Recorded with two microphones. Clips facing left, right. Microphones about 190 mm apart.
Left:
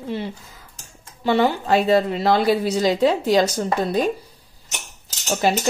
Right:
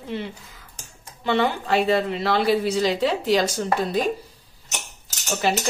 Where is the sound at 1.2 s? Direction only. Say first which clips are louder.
Left 3 dB; 40° left (ahead or behind).